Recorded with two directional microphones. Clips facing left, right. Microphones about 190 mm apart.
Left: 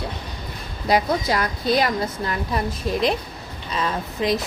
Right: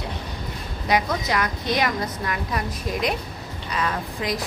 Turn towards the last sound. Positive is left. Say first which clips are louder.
# left 4 dB
turn(degrees=25)  # may be behind; listen again after turning